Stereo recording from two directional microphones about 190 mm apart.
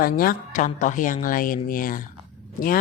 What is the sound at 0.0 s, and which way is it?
Speech, 50° left (ahead or behind).